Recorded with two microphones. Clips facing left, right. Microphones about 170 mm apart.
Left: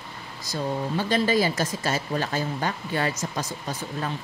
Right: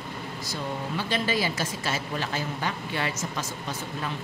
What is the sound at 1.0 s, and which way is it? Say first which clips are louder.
A woman's voice: left 5 dB; 45° left (ahead or behind).